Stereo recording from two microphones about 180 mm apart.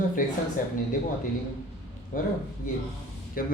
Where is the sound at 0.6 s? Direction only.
50° left (ahead or behind).